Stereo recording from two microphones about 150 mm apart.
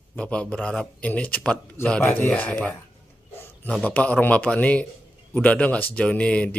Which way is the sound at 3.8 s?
10° left (ahead or behind).